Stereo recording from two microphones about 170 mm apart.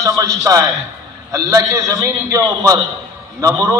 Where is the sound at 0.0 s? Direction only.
20° right (ahead or behind).